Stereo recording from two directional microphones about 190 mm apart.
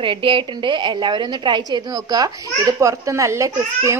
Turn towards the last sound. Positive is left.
turn(degrees=-15)  # may be behind; listen again after turning